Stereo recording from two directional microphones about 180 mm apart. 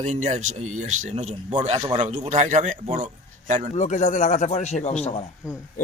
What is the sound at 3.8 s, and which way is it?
Speech, 45° left (ahead or behind).